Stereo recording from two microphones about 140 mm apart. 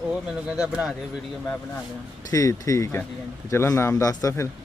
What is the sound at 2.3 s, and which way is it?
A man's voice, 25° left (ahead or behind).